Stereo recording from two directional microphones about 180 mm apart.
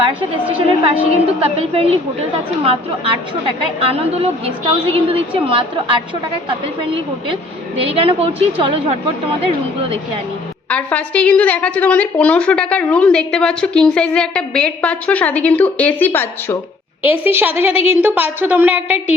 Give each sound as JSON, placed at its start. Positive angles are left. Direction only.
{"t": 0.6, "sound": "a woman's voice", "side_deg": -35}
{"t": 7.9, "sound": "a woman's voice", "side_deg": -30}
{"t": 10.7, "sound": "a woman's voice", "side_deg": 10}
{"t": 17.0, "sound": "a woman's voice", "side_deg": -10}